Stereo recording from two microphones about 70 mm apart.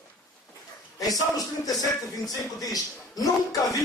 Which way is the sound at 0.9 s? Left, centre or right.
Left.